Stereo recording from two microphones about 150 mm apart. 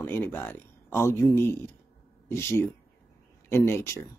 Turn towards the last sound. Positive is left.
turn(degrees=15)  # may be behind; listen again after turning